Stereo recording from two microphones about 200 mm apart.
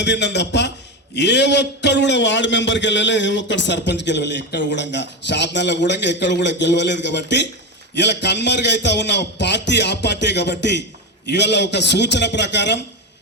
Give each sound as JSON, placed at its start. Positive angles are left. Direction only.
{"t": 0.0, "sound": "a man's voice", "side_deg": 60}